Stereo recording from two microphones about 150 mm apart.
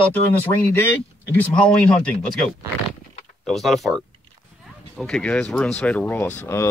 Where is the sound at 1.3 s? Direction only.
10° left (ahead or behind).